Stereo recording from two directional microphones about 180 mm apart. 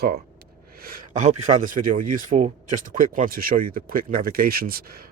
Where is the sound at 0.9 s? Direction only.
50° right (ahead or behind).